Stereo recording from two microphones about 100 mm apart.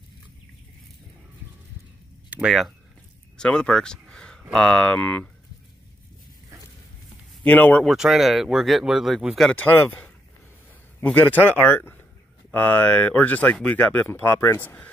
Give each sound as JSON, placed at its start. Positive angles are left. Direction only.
{"t": 2.2, "sound": "a sound", "side_deg": -15}
{"t": 3.3, "sound": "speech", "side_deg": 10}
{"t": 7.4, "sound": "speech", "side_deg": 15}
{"t": 7.8, "sound": "speech", "side_deg": -5}
{"t": 9.5, "sound": "speech", "side_deg": 20}